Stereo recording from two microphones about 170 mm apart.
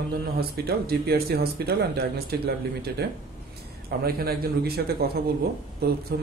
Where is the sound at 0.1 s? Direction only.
65° right (ahead or behind).